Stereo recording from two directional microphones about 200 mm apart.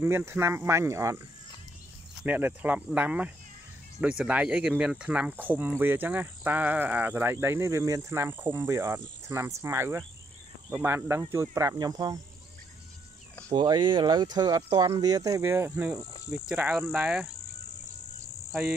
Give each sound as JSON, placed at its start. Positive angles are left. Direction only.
{"t": 0.0, "sound": "speech", "side_deg": -10}
{"t": 2.2, "sound": "speech", "side_deg": -10}
{"t": 13.6, "sound": "speech", "side_deg": -20}
{"t": 18.5, "sound": "speech", "side_deg": -5}